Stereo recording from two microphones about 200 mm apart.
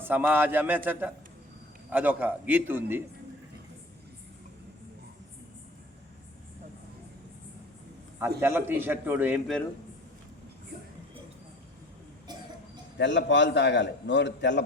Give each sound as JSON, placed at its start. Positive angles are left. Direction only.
{"t": 0.0, "sound": "a man's voice", "side_deg": -10}
{"t": 8.4, "sound": "a man's voice", "side_deg": -10}
{"t": 13.0, "sound": "a man's voice", "side_deg": 65}